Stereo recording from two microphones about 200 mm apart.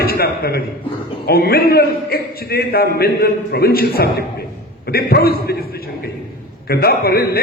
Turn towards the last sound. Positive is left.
turn(degrees=50)  # may be behind; listen again after turning